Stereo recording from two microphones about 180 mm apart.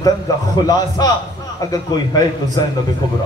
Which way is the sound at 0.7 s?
20° left (ahead or behind).